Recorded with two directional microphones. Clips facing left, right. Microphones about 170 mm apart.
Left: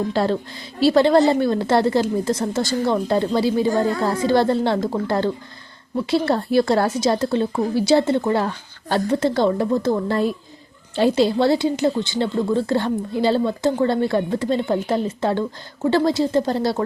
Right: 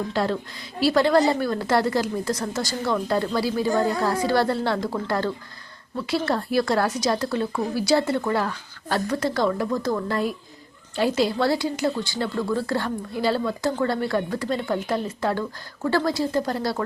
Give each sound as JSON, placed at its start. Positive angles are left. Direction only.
{"t": 0.1, "sound": "a woman's voice", "side_deg": 30}